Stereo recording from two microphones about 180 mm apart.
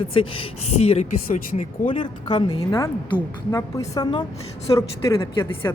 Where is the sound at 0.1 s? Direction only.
30° left (ahead or behind).